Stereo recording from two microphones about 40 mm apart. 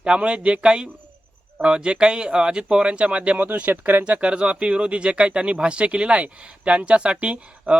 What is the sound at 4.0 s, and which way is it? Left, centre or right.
Speech, right.